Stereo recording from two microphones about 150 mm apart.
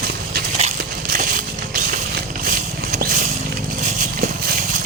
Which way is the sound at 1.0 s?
65° right (ahead or behind).